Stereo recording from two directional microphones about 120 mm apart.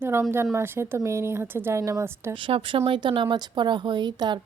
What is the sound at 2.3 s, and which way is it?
Speech, 45° right (ahead or behind).